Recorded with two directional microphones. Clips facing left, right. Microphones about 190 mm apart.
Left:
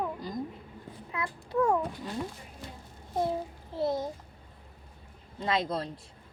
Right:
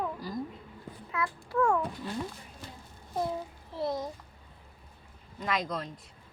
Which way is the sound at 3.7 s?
25° left (ahead or behind).